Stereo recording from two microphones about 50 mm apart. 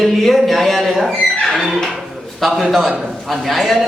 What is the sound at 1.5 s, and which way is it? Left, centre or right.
Squeak, centre.